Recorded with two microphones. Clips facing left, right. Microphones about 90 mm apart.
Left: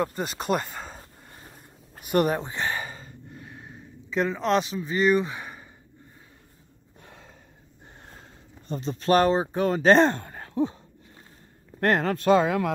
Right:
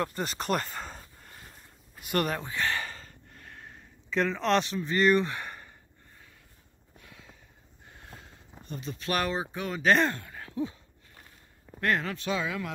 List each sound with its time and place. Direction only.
0.0 s a sound: 5° left (ahead or behind)
2.1 s speech: 20° left (ahead or behind)
2.7 s a sound: 10° left (ahead or behind)
7.0 s gasp: 40° left (ahead or behind)
8.1 s speech: 35° left (ahead or behind)
11.8 s speech: 40° left (ahead or behind)